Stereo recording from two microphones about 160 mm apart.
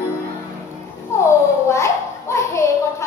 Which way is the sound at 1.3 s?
20° left (ahead or behind).